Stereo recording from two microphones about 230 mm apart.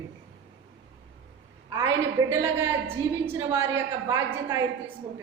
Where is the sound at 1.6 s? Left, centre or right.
Centre.